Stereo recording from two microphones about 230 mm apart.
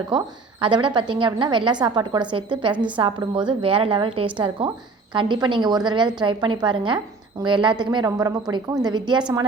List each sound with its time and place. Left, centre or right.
0.1 s a woman's voice: centre